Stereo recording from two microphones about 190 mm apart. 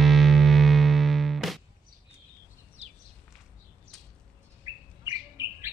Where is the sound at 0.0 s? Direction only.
Centre (ahead or behind).